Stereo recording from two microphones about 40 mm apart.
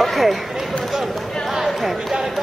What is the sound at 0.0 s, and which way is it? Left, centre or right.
Run, centre.